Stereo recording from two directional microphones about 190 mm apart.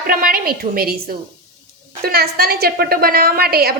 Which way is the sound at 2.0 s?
55° right (ahead or behind).